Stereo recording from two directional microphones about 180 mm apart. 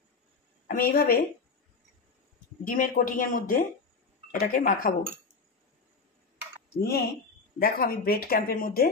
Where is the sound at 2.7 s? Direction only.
50° left (ahead or behind).